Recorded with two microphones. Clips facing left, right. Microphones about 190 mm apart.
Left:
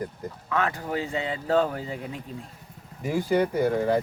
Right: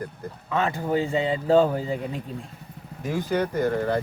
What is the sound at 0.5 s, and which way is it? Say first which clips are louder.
A man's voice: right 3 dB; 25° right (ahead or behind).